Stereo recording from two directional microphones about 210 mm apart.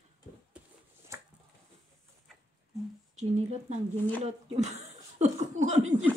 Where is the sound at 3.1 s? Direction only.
30° right (ahead or behind).